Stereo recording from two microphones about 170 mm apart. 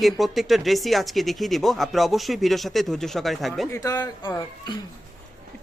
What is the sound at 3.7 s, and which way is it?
Speech, 20° left (ahead or behind).